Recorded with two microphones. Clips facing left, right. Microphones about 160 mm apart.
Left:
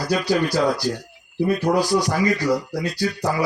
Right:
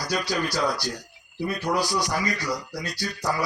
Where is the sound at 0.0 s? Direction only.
25° left (ahead or behind).